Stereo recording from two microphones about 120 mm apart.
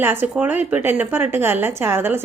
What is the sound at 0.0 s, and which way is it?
A woman's voice, 20° right (ahead or behind).